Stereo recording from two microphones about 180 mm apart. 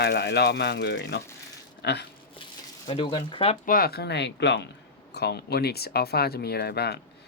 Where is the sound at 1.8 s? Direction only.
70° left (ahead or behind).